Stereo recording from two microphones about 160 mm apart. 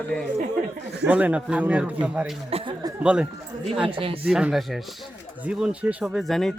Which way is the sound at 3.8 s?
35° right (ahead or behind).